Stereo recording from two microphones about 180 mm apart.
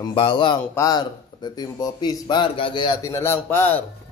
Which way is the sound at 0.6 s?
15° left (ahead or behind).